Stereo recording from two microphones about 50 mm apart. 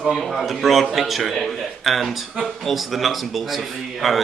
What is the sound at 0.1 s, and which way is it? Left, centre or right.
Speech, centre.